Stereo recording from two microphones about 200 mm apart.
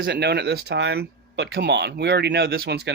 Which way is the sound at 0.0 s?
55° right (ahead or behind).